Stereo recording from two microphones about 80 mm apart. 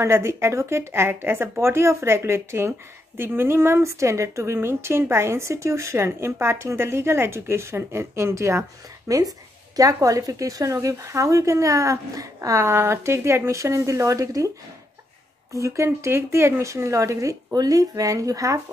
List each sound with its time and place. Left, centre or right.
0.0 s a woman's voice: right
15.5 s a woman's voice: right